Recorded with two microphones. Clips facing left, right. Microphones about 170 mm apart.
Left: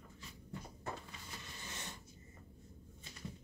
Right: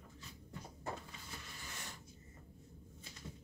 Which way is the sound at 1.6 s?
20° left (ahead or behind).